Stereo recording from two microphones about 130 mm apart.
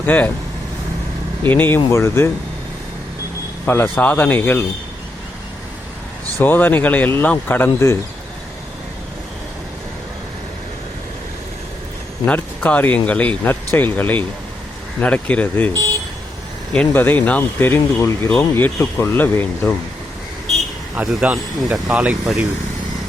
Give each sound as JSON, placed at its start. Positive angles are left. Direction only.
{"t": 0.0, "sound": "speech", "side_deg": 15}
{"t": 1.5, "sound": "speech", "side_deg": 15}
{"t": 3.7, "sound": "speech", "side_deg": 15}
{"t": 6.4, "sound": "speech", "side_deg": 15}
{"t": 12.2, "sound": "speech", "side_deg": 10}
{"t": 16.7, "sound": "speech", "side_deg": 15}
{"t": 20.9, "sound": "speech", "side_deg": -5}